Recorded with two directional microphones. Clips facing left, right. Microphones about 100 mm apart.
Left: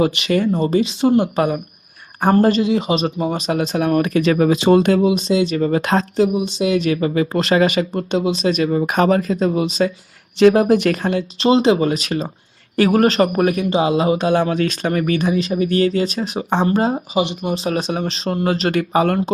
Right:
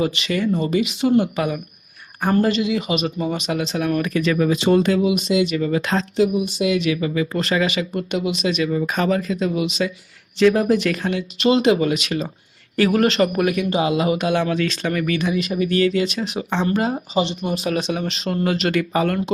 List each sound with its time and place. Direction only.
0.2 s speech: 45° left (ahead or behind)
4.8 s speech: 50° left (ahead or behind)
5.0 s speech: 35° left (ahead or behind); by 6.1 s 50° left (ahead or behind)
6.1 s speech: 25° left (ahead or behind)
6.7 s speech: 40° left (ahead or behind)
10.3 s speech: 50° left (ahead or behind)
16.6 s speech: 30° left (ahead or behind)
17.2 s speech: 15° left (ahead or behind)
17.5 s speech: 30° left (ahead or behind)